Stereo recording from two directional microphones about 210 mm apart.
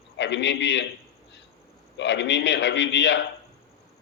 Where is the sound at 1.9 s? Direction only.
55° left (ahead or behind).